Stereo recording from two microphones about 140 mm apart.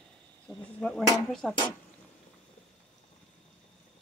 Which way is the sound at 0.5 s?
5° left (ahead or behind).